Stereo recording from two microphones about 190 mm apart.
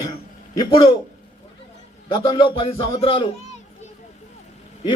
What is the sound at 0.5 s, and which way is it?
Speech, 25° left (ahead or behind).